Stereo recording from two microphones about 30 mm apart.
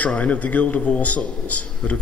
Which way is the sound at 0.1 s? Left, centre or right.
Left.